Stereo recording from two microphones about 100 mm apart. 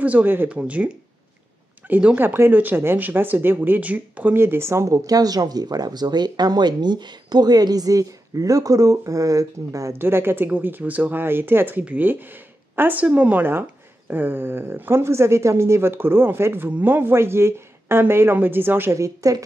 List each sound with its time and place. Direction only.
0.0 s speech: 15° right (ahead or behind)
1.9 s speech: 15° right (ahead or behind); by 9.9 s 35° right (ahead or behind)
9.9 s speech: 20° right (ahead or behind)